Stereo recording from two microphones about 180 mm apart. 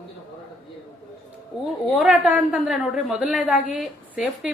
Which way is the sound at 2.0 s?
10° right (ahead or behind).